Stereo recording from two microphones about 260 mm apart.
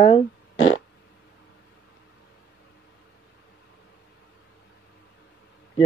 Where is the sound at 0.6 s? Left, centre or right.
Left.